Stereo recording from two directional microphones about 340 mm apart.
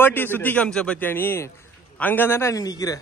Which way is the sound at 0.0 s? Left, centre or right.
Centre.